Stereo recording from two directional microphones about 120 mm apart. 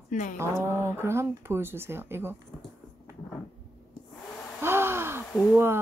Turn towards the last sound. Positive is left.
turn(degrees=0)  # may be behind; listen again after turning